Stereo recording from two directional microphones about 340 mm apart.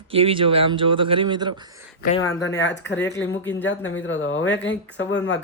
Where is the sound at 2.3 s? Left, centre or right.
Left.